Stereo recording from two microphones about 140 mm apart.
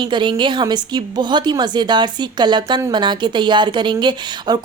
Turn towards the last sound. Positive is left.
turn(degrees=-35)  # may be behind; listen again after turning